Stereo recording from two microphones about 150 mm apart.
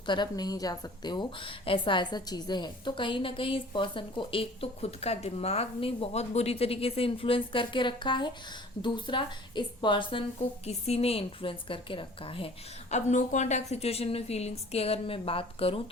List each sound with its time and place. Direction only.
0.0 s a woman's voice: 30° left (ahead or behind)
12.9 s a woman's voice: 50° left (ahead or behind)